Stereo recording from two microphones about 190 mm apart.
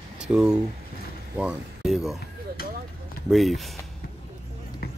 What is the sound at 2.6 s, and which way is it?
Speech, 50° left (ahead or behind).